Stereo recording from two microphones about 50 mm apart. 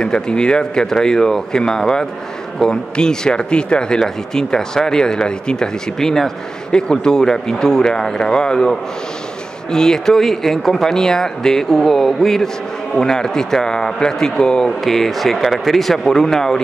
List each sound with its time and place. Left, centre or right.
0.0 s speech: centre